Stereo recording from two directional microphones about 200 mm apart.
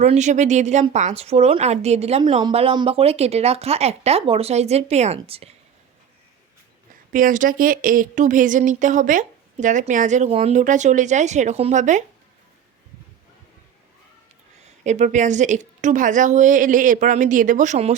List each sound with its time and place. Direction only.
0.0 s speech: 35° right (ahead or behind)
7.1 s speech: 40° right (ahead or behind)
14.6 s speech: 35° right (ahead or behind)